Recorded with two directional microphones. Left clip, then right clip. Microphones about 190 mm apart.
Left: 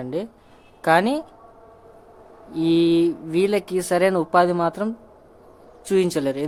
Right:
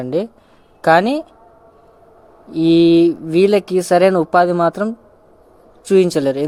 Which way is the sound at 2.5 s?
30° right (ahead or behind).